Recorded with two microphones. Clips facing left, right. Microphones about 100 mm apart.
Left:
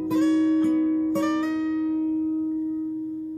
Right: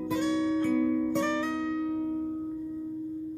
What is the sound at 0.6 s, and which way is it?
Music, 30° left (ahead or behind).